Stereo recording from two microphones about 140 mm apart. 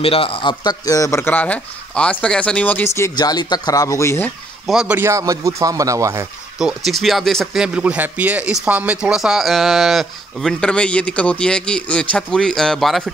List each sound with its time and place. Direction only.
0.0 s speech: 40° left (ahead or behind); by 4.3 s 20° left (ahead or behind)
4.6 s speech: 5° right (ahead or behind)
4.9 s speech: 20° right (ahead or behind)
6.6 s speech: centre (ahead or behind)